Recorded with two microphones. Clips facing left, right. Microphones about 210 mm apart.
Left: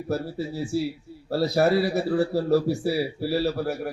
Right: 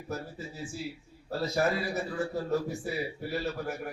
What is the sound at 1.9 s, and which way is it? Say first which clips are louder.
A man's voice: left 9 dB; 35° left (ahead or behind).